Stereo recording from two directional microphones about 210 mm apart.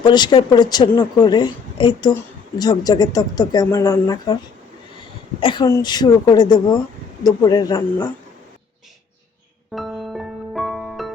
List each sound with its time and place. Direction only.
0.0 s speech: 20° left (ahead or behind)
9.7 s music: centre (ahead or behind)